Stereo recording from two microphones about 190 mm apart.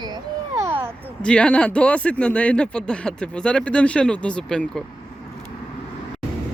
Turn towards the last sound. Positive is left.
turn(degrees=5)  # may be behind; listen again after turning